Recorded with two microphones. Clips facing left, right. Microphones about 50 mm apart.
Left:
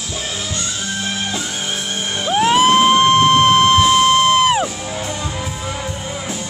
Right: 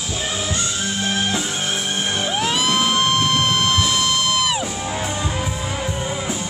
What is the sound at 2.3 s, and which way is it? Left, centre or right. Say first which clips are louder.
Music: left 10 dB; left.